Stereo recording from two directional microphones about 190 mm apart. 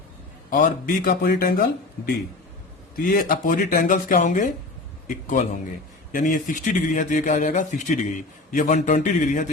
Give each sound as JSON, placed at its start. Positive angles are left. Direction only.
{"t": 0.5, "sound": "speech", "side_deg": 45}